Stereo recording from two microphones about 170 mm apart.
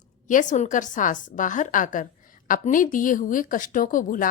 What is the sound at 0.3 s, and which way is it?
A woman's voice, 50° left (ahead or behind).